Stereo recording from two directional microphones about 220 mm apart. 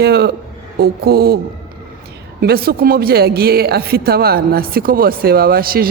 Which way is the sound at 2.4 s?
45° right (ahead or behind).